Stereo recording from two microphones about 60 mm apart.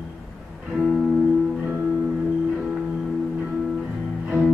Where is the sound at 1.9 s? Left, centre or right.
Centre.